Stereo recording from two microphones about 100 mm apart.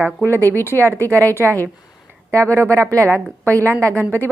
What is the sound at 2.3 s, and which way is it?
A woman's voice, 30° right (ahead or behind).